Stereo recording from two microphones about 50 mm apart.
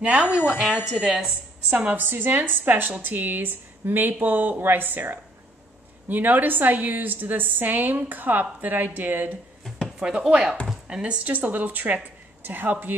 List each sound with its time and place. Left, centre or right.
0.0 s speech: right
1.8 s a woman's voice: right
9.9 s speech: centre
10.9 s a woman's voice: right